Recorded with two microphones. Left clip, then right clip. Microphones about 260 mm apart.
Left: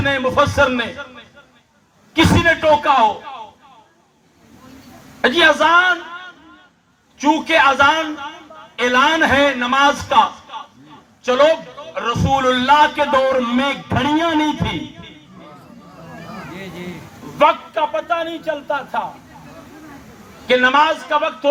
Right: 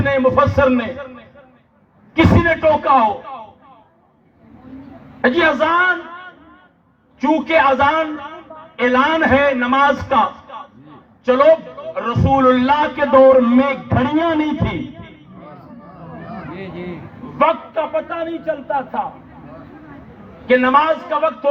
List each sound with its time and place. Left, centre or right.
0.0 s a man's voice: left
5.2 s a man's voice: left
16.6 s a sound: right
17.3 s a man's voice: left
20.5 s a man's voice: left